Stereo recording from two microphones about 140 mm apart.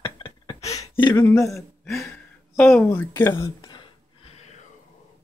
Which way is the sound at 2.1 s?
10° left (ahead or behind).